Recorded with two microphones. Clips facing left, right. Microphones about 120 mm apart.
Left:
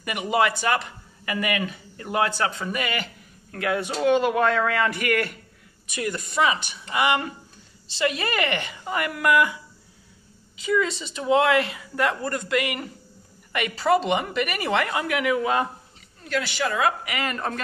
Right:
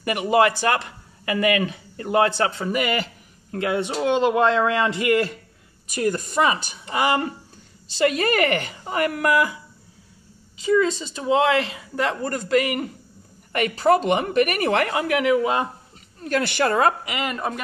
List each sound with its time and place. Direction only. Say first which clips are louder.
0.0 s speech: right 4 dB; 40° right (ahead or behind)
1.7 s speech: right 6 dB; 30° right (ahead or behind)
5.9 s speech: right 6 dB; 40° right (ahead or behind)
8.0 s speech: right 5 dB; 45° right (ahead or behind)
10.6 s a woman's voice: right 4 dB; 35° right (ahead or behind); by 14.7 s 50° right (ahead or behind)
14.9 s speech: right 4 dB; 30° right (ahead or behind)
16.3 s a woman's voice: right 5 dB; 50° right (ahead or behind)
17.0 s a woman's voice: right 2 dB; 20° right (ahead or behind)